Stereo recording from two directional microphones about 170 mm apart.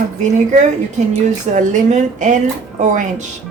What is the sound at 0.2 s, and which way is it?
Speech, 45° right (ahead or behind).